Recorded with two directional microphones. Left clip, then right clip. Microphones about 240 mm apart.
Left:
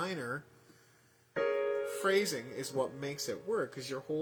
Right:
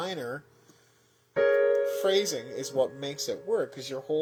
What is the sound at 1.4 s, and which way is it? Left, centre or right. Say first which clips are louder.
Music: right 9 dB; centre.